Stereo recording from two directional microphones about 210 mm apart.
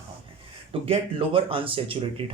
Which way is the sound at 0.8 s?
25° right (ahead or behind).